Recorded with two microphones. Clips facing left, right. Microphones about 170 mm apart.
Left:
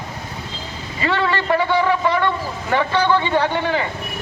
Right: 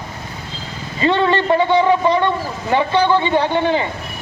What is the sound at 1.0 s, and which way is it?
A man's voice, 25° right (ahead or behind).